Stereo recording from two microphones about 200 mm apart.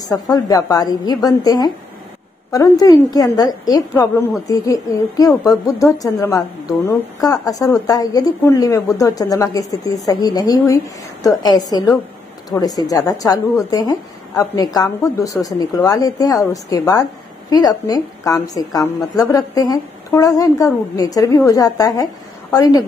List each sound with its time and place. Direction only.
0.1 s a woman's voice: 20° left (ahead or behind)